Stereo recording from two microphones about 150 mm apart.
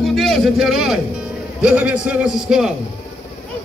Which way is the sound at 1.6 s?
5° right (ahead or behind).